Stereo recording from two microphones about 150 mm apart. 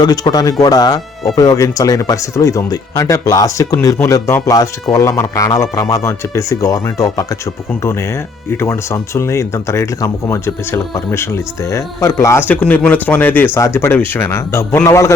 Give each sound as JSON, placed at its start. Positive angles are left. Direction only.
{"t": 0.0, "sound": "speech", "side_deg": 25}